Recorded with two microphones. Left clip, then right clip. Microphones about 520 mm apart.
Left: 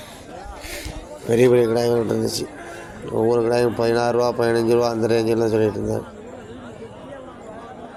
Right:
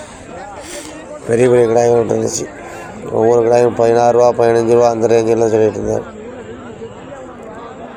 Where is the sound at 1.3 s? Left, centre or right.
Left.